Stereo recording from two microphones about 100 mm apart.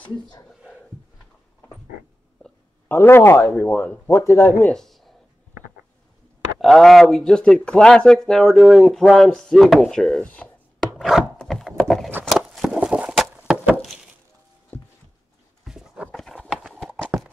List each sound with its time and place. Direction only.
2.9 s speech: 25° left (ahead or behind)
4.6 s a sound: 5° left (ahead or behind)
6.6 s speech: centre (ahead or behind)
11.0 s chopping: centre (ahead or behind)
11.3 s a sound: 5° left (ahead or behind); by 13.7 s 15° right (ahead or behind)
14.7 s a sound: 20° left (ahead or behind)
15.6 s dog: 5° right (ahead or behind)
16.1 s horse: 10° left (ahead or behind)
16.4 s clip-clop: centre (ahead or behind)